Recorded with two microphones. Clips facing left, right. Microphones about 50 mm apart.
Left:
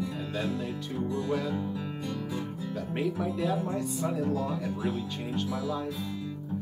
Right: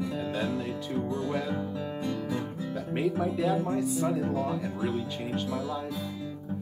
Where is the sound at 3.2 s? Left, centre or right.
Centre.